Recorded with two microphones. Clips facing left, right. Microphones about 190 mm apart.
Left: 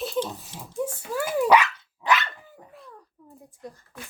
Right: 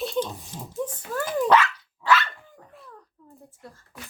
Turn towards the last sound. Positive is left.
turn(degrees=15)  # may be behind; listen again after turning